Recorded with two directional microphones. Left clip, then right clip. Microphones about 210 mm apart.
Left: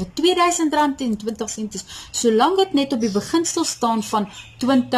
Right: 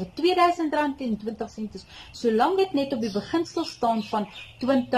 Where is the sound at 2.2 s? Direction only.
20° left (ahead or behind).